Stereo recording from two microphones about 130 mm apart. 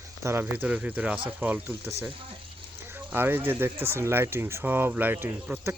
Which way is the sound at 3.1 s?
15° right (ahead or behind).